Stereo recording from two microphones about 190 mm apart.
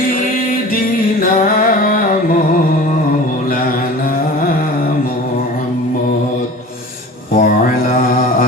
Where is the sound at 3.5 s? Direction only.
45° left (ahead or behind).